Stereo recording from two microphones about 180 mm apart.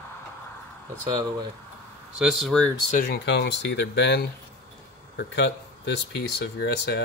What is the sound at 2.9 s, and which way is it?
Speech, 60° left (ahead or behind).